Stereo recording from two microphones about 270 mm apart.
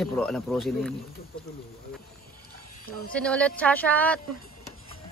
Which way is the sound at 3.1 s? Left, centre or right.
Centre.